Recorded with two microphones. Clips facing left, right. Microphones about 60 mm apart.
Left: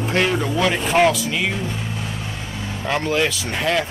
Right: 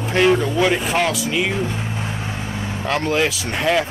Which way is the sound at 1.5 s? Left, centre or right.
Right.